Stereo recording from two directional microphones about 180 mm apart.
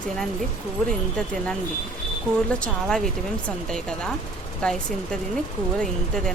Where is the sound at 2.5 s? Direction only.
5° left (ahead or behind).